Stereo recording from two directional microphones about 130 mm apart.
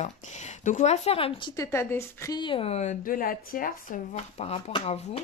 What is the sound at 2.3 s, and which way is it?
Speech, 40° left (ahead or behind).